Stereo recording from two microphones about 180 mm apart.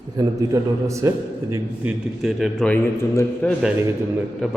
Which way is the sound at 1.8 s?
Centre (ahead or behind).